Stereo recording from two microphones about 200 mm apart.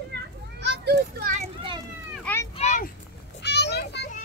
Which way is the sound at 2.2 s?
10° left (ahead or behind).